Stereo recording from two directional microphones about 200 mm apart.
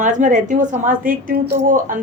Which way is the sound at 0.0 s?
40° right (ahead or behind).